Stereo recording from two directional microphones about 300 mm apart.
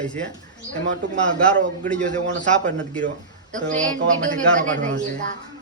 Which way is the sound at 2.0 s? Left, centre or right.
Right.